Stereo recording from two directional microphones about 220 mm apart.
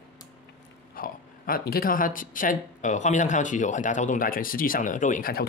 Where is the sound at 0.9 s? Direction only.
40° left (ahead or behind).